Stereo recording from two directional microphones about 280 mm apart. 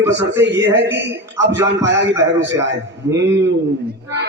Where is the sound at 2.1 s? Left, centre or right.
Centre.